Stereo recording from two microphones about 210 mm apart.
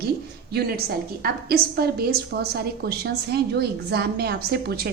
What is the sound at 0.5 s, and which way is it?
A woman's voice, 50° right (ahead or behind).